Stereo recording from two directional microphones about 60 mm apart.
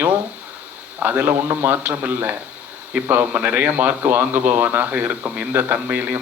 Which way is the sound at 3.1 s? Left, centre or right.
Right.